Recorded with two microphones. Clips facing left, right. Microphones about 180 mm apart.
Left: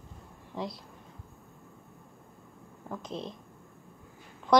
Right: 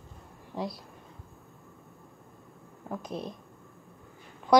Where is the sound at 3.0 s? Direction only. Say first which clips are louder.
Even; 20° left (ahead or behind).